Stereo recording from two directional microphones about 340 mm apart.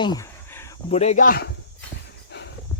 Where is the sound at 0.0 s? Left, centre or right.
Centre.